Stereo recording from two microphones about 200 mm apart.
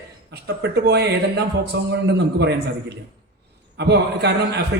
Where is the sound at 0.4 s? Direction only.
55° right (ahead or behind).